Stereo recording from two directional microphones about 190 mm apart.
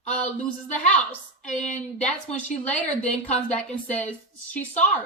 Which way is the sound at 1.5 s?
40° left (ahead or behind).